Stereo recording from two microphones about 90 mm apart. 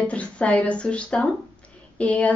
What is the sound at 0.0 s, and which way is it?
A woman's voice, 15° left (ahead or behind).